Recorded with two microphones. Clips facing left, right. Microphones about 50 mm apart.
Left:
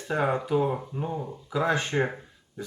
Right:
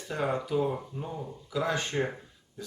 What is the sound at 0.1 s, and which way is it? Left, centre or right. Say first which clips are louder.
Speech: left 4 dB; left.